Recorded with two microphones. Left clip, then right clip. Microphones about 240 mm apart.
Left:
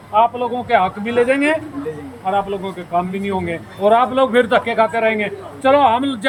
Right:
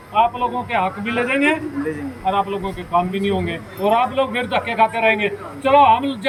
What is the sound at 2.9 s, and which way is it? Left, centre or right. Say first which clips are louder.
A man's voice: right 1 dB; centre.